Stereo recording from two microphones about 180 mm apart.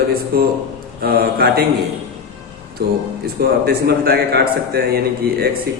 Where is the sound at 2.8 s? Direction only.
60° right (ahead or behind).